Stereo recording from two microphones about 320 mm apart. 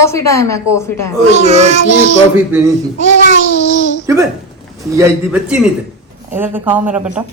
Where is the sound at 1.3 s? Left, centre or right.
Right.